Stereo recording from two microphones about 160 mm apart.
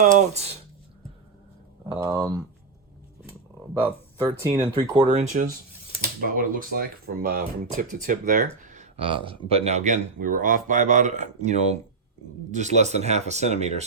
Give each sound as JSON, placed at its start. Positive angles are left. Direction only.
{"t": 0.2, "sound": "speech", "side_deg": -45}
{"t": 1.9, "sound": "speech", "side_deg": -20}
{"t": 4.3, "sound": "speech", "side_deg": -20}
{"t": 6.3, "sound": "speech", "side_deg": -60}